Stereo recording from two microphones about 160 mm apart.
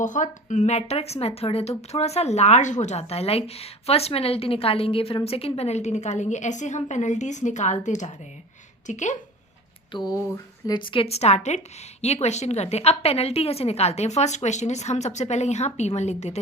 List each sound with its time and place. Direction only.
0.0 s a woman's voice: 50° left (ahead or behind)
9.9 s a woman's voice: 25° left (ahead or behind); by 16.4 s 45° left (ahead or behind)